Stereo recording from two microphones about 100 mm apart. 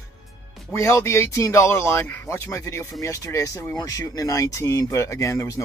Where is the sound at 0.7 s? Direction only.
30° left (ahead or behind).